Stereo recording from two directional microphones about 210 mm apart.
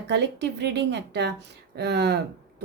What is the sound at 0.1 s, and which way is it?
A woman's voice, 55° right (ahead or behind).